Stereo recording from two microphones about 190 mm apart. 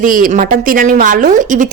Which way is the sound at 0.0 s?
45° right (ahead or behind).